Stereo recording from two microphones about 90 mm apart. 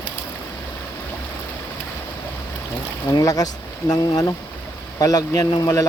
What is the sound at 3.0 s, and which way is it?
Speech, 40° left (ahead or behind).